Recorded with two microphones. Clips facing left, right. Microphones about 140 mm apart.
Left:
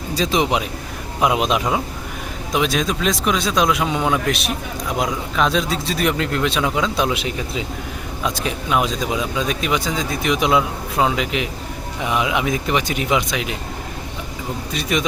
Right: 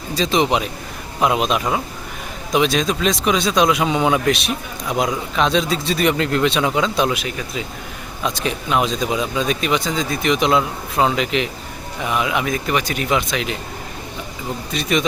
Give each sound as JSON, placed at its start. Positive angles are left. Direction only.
{"t": 0.1, "sound": "speech", "side_deg": 10}
{"t": 2.5, "sound": "speech", "side_deg": 5}
{"t": 7.1, "sound": "speech", "side_deg": 25}
{"t": 8.4, "sound": "speech", "side_deg": 5}
{"t": 14.7, "sound": "speech", "side_deg": 10}